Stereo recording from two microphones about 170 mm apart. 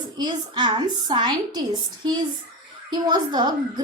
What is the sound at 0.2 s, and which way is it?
A woman's voice, 25° right (ahead or behind).